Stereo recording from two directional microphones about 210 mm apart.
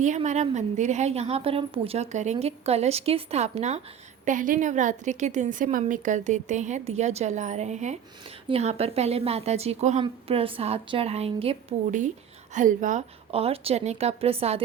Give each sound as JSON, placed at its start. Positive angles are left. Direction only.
{"t": 0.0, "sound": "a woman's voice", "side_deg": -35}